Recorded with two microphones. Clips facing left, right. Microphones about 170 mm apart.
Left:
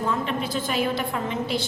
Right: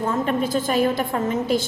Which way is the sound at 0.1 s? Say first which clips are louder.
Right 5 dB; 45° right (ahead or behind).